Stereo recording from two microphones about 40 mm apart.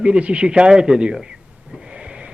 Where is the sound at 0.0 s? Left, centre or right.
Right.